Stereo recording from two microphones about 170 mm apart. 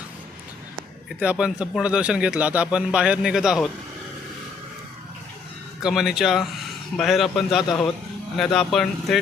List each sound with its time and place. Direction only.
1.2 s a man's voice: 5° right (ahead or behind)
5.8 s a man's voice: centre (ahead or behind)